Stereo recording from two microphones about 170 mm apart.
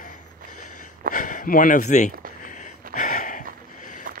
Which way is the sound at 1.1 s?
55° left (ahead or behind).